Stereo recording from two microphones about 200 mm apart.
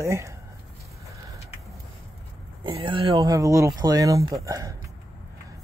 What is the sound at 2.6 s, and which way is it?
Speech, 25° right (ahead or behind).